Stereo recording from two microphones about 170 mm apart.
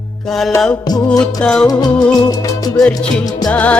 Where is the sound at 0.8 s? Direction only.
25° left (ahead or behind).